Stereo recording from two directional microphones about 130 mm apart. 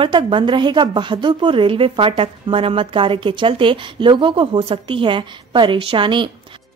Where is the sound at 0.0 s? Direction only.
40° right (ahead or behind).